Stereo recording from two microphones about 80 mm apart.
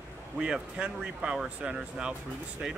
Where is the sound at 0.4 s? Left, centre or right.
Centre.